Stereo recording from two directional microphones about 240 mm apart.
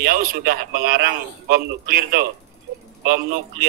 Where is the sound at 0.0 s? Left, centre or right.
Right.